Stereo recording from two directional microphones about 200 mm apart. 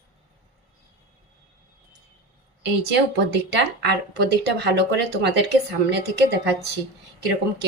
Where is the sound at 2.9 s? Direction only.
60° right (ahead or behind).